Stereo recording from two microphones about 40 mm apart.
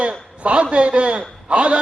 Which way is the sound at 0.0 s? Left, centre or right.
Right.